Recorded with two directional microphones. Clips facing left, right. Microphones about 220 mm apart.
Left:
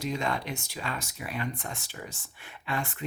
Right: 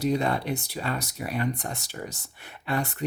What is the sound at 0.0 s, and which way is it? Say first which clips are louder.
Speech: right 6 dB; 35° right (ahead or behind).